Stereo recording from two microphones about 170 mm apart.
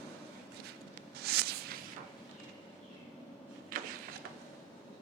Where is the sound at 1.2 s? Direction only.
70° right (ahead or behind).